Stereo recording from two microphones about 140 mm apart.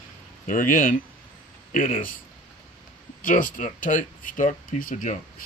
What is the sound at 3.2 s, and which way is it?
Speech, 75° left (ahead or behind).